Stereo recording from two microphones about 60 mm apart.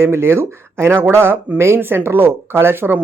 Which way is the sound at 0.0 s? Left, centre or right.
Right.